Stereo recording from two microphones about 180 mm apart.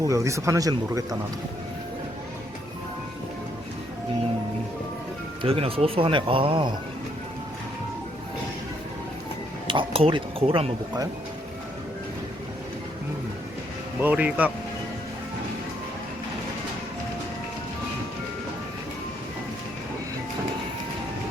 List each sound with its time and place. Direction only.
0.0 s speech: 15° right (ahead or behind)
5.4 s speech: 30° right (ahead or behind)
9.6 s speech: 30° right (ahead or behind)
14.0 s speech: 10° right (ahead or behind)